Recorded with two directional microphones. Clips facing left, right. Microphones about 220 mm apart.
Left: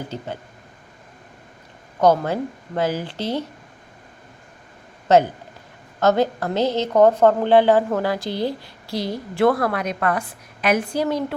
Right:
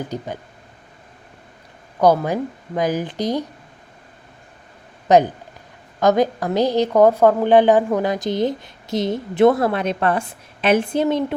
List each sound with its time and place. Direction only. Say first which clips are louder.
0.1 s a woman's voice: right 4 dB; 15° right (ahead or behind)
2.0 s a woman's voice: right 1 dB; 10° right (ahead or behind)
5.0 s a woman's voice: right 1 dB; 15° right (ahead or behind)